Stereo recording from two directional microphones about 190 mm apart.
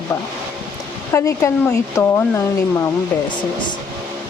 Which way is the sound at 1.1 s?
15° left (ahead or behind).